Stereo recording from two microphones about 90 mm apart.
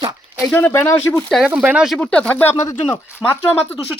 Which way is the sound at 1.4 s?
15° right (ahead or behind).